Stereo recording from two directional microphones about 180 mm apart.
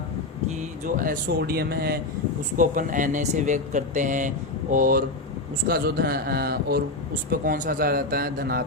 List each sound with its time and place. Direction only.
0.9 s a man's voice: 50° right (ahead or behind)
2.6 s a man's voice: 50° right (ahead or behind)